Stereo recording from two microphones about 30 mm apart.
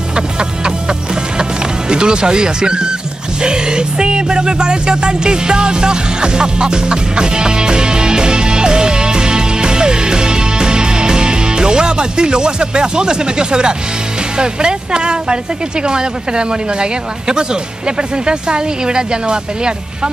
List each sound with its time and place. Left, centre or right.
0.1 s music: right
1.4 s speech: right